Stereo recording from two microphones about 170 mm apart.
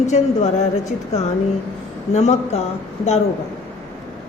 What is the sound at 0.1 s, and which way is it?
Speech, 40° left (ahead or behind).